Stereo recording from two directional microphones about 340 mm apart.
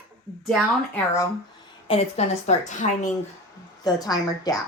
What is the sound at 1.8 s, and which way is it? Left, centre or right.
A woman's voice, centre.